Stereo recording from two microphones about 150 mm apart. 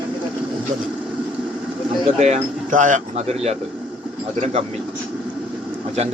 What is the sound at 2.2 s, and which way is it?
Speech, 50° right (ahead or behind).